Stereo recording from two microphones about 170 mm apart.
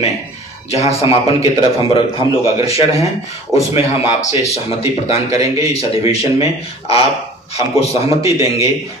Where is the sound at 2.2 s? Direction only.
20° right (ahead or behind).